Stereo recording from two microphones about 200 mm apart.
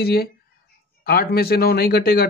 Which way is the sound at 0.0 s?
50° left (ahead or behind).